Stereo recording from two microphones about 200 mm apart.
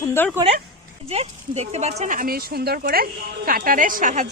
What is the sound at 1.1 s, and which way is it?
Speech, 30° right (ahead or behind).